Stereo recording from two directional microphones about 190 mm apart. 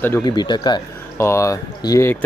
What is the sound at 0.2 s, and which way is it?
Speech, 20° left (ahead or behind).